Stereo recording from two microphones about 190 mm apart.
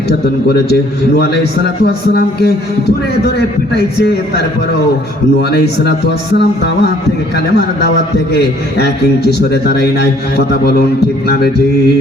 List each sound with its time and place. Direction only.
0.1 s a man's voice: 60° left (ahead or behind)